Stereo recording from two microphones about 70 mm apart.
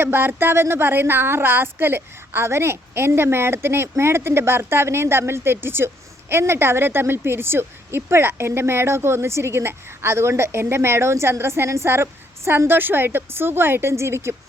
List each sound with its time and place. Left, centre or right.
0.0 s a woman's voice: right